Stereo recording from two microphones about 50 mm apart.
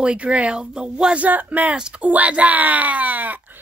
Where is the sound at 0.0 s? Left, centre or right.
Right.